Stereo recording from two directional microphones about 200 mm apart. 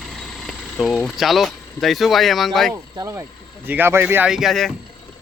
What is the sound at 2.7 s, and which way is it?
Speech, 15° right (ahead or behind).